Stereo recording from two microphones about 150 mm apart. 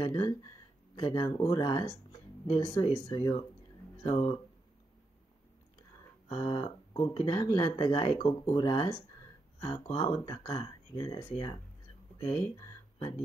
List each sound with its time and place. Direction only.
0.0 s speech: 30° left (ahead or behind)
6.2 s speech: 30° left (ahead or behind)
9.9 s speech: 30° left (ahead or behind)